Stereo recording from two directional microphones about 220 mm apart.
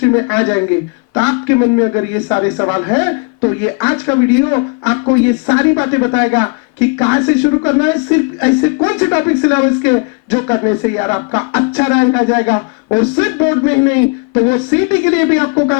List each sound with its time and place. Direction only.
0.0 s speech: 15° left (ahead or behind)